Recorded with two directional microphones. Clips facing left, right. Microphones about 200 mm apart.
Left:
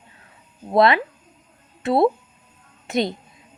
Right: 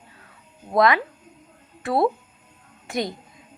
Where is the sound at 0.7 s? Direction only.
25° left (ahead or behind).